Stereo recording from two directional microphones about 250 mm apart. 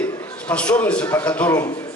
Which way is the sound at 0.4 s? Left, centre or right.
Centre.